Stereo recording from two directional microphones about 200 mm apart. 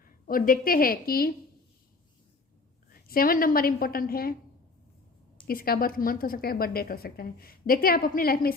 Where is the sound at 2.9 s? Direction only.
45° left (ahead or behind).